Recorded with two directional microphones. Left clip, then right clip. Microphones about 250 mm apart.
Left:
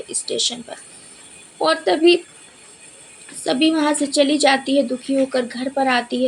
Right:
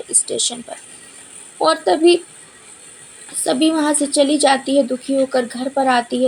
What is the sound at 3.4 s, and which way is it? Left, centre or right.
A woman's voice, centre.